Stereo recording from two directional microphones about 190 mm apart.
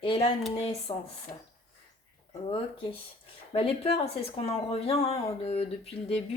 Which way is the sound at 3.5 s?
30° left (ahead or behind).